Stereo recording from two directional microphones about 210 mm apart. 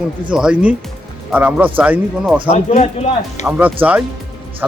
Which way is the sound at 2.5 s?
30° left (ahead or behind).